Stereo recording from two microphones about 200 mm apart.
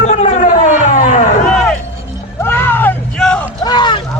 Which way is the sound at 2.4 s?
10° left (ahead or behind).